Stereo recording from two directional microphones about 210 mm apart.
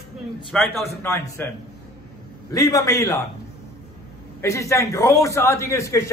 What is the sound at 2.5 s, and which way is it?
Speech, 15° left (ahead or behind).